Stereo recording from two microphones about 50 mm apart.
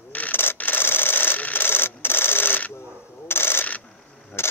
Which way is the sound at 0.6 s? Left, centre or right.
Left.